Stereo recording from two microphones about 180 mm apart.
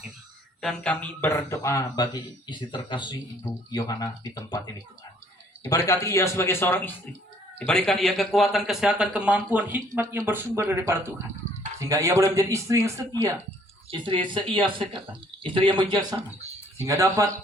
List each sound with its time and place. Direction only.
0.6 s speech: 5° left (ahead or behind); by 13.1 s 15° right (ahead or behind)
13.9 s speech: 25° right (ahead or behind)